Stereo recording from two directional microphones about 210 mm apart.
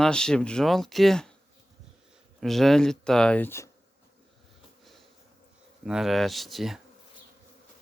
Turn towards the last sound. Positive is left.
turn(degrees=0)  # may be behind; listen again after turning